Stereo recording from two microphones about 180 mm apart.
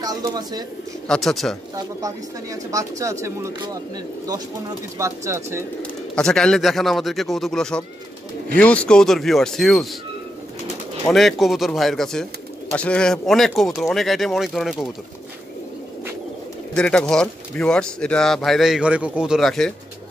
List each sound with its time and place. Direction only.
0.0 s speech: 20° right (ahead or behind)
1.0 s speech: centre (ahead or behind)
1.8 s speech: 20° right (ahead or behind)
5.8 s speech: 5° left (ahead or behind)
11.1 s speech: centre (ahead or behind)
16.7 s speech: 5° left (ahead or behind)